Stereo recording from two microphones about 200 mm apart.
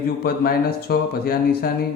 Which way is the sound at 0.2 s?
50° left (ahead or behind).